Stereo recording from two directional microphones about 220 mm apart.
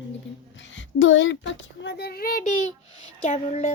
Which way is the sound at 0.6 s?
60° left (ahead or behind).